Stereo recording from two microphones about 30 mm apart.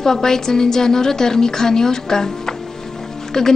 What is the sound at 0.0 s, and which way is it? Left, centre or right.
A woman's voice, centre.